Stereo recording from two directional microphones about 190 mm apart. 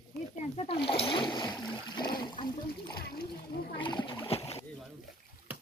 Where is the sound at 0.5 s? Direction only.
30° left (ahead or behind).